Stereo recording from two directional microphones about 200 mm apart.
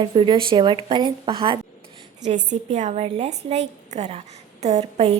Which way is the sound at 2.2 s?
35° right (ahead or behind).